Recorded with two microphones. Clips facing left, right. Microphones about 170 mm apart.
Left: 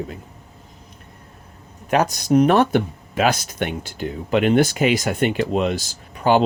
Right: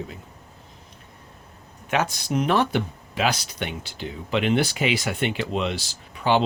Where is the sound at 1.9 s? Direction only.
40° left (ahead or behind).